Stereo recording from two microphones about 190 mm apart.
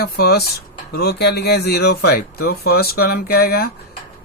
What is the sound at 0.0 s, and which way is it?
Speech, 55° left (ahead or behind).